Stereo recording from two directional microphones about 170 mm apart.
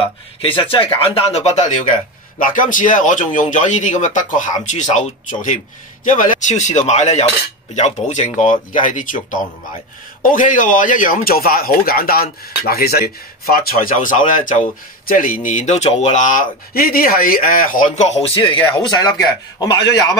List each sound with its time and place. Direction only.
0.4 s speech: 30° left (ahead or behind)